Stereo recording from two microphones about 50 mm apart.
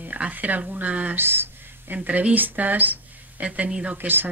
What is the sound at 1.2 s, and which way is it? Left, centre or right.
Speech, right.